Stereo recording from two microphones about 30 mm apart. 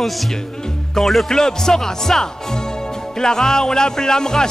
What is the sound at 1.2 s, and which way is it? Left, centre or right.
Speech, centre.